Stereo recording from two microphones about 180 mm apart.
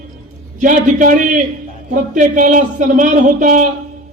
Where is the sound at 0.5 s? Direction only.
45° right (ahead or behind).